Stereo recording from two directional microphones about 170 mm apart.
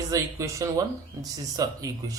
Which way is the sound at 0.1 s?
20° right (ahead or behind).